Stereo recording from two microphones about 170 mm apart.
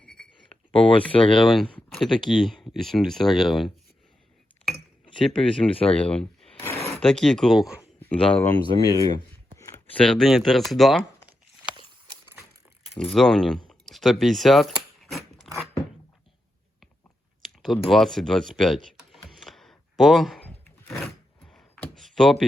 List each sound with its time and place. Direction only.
0.0 s a sound: 5° left (ahead or behind)
0.7 s speech: 30° left (ahead or behind)
1.4 s speech: centre (ahead or behind)
5.7 s speech: 35° left (ahead or behind)
6.0 s speech: 5° left (ahead or behind)
8.6 s speech: 20° left (ahead or behind)
9.6 s a sound: 20° left (ahead or behind)
10.0 s speech: 5° left (ahead or behind)
13.0 s speech: centre (ahead or behind)
13.7 s mechanisms: centre (ahead or behind)
17.4 s computer keyboard: centre (ahead or behind)
21.5 s a sound: centre (ahead or behind)